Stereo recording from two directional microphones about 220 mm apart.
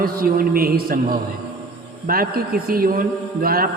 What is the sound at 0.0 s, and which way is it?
A man's voice, 40° right (ahead or behind).